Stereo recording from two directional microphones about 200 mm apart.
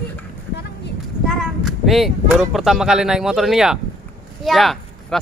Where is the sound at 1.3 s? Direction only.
Centre (ahead or behind).